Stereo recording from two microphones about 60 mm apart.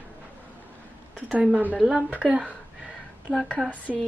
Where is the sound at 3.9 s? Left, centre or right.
Centre.